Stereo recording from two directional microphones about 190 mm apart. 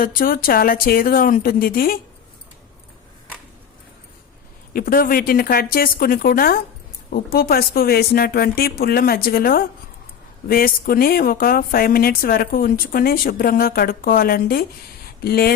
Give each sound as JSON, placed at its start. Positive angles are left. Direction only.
{"t": 0.0, "sound": "speech", "side_deg": 50}
{"t": 4.7, "sound": "speech", "side_deg": 50}